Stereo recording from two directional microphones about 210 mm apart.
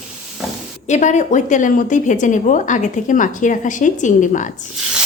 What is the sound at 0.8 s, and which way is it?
Frying, 35° left (ahead or behind).